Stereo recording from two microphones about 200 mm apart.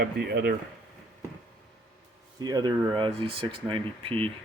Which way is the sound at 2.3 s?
20° right (ahead or behind).